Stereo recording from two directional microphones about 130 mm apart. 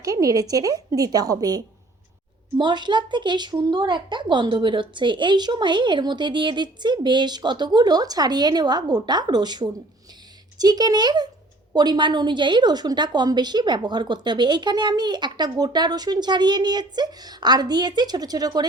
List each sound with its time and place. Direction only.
0.0 s a woman's voice: 25° right (ahead or behind)